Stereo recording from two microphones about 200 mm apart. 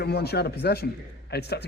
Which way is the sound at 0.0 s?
55° left (ahead or behind).